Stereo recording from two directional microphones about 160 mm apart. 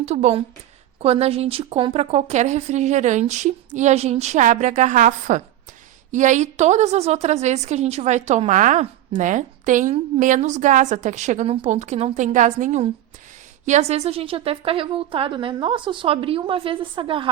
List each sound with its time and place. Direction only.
0.0 s a woman's voice: 45° right (ahead or behind)